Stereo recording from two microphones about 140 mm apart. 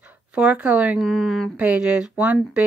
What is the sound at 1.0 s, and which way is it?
Speech, centre (ahead or behind).